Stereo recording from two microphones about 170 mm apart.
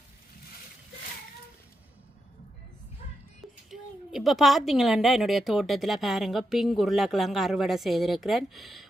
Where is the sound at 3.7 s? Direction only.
Centre (ahead or behind).